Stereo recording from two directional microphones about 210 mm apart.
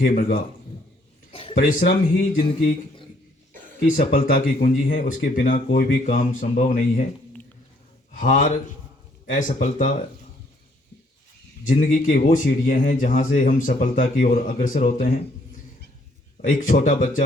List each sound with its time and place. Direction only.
0.0 s speech: 45° left (ahead or behind)
1.3 s a sound: 25° left (ahead or behind)
1.5 s speech: 45° left (ahead or behind)
3.9 s a man's voice: 45° left (ahead or behind)
8.1 s a man's voice: 40° left (ahead or behind)
11.7 s a man's voice: 35° left (ahead or behind)
16.5 s a man's voice: 40° left (ahead or behind)